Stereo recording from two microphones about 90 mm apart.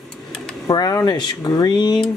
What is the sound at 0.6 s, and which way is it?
Speech, 45° left (ahead or behind).